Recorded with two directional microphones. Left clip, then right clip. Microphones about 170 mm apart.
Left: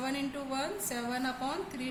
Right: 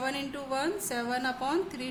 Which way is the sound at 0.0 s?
40° right (ahead or behind).